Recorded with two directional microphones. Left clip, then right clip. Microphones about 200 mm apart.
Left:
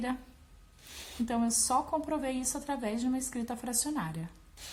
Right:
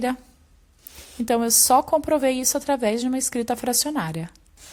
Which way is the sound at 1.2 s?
45° right (ahead or behind).